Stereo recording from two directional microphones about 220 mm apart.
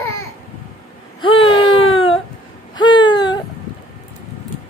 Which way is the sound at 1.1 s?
25° left (ahead or behind).